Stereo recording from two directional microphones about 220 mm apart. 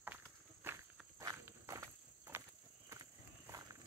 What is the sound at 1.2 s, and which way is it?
Walk, 15° right (ahead or behind).